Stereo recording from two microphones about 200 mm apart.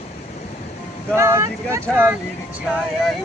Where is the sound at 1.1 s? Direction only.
15° right (ahead or behind).